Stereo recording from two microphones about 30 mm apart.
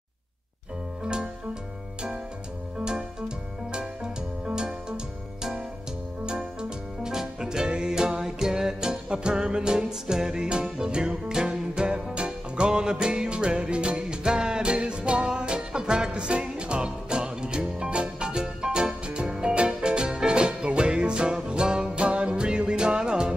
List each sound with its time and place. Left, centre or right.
1.0 s music: right
2.8 s music: right
7.0 s music: right
21.9 s music: right